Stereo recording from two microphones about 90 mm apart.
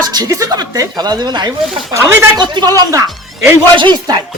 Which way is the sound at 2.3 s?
55° right (ahead or behind).